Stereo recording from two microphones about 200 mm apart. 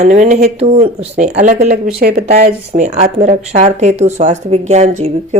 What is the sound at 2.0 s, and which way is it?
Speech, 50° right (ahead or behind).